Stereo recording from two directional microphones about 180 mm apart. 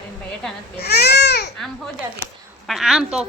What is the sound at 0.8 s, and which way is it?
Baby cry, 65° left (ahead or behind).